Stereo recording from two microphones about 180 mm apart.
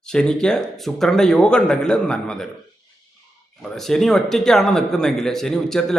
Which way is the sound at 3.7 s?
Centre (ahead or behind).